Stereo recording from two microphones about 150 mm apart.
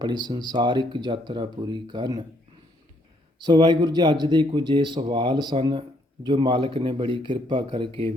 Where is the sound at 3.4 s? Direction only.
25° right (ahead or behind).